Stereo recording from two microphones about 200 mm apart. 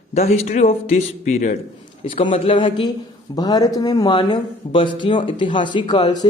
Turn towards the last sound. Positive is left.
turn(degrees=20)  # may be behind; listen again after turning